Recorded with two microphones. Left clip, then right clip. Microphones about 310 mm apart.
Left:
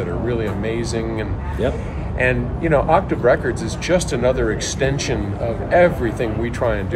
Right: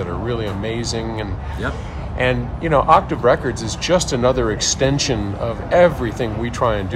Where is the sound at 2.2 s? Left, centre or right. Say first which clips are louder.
Even; right.